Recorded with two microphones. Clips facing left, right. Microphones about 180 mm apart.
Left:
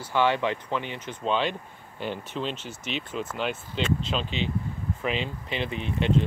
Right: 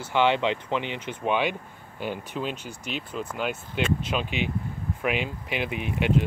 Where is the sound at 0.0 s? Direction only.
20° right (ahead or behind).